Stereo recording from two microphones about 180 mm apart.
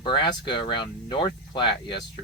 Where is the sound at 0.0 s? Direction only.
25° left (ahead or behind).